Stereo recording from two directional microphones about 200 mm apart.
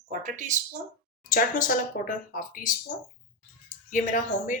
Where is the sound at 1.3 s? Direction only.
40° left (ahead or behind).